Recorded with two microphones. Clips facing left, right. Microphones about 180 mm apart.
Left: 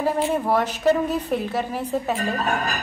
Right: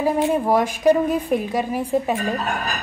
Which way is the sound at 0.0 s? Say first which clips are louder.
Right 3 dB; 10° right (ahead or behind).